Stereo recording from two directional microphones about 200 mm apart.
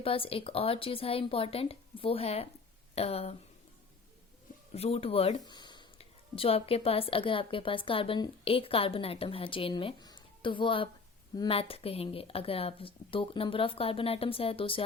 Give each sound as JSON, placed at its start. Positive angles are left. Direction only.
{"t": 0.0, "sound": "speech", "side_deg": 30}
{"t": 4.7, "sound": "speech", "side_deg": 30}